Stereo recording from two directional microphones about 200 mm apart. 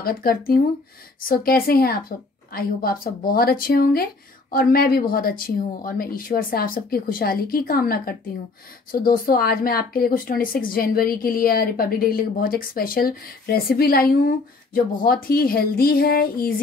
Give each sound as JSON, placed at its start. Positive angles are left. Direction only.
{"t": 0.0, "sound": "a woman's voice", "side_deg": 50}